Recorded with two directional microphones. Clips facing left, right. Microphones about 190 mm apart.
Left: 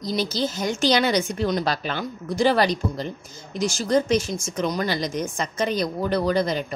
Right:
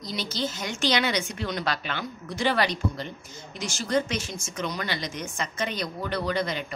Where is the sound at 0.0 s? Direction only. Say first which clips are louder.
Left 6 dB; 40° left (ahead or behind).